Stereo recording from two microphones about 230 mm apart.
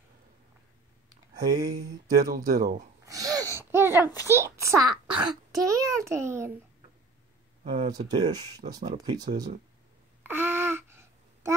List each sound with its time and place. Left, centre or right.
1.3 s speech: centre
2.1 s speech: right
3.1 s a sound: centre
4.2 s a child's voice: centre
7.6 s a child's voice: right
10.2 s a sound: centre